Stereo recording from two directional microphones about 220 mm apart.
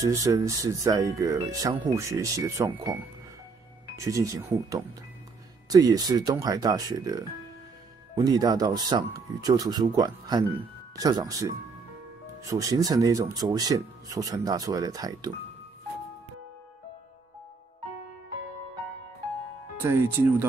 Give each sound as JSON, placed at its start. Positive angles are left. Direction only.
{"t": 0.0, "sound": "speech", "side_deg": -15}
{"t": 19.8, "sound": "speech", "side_deg": -10}